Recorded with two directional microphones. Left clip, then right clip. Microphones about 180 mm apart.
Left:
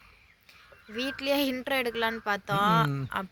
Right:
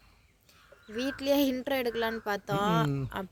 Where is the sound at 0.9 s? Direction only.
20° right (ahead or behind).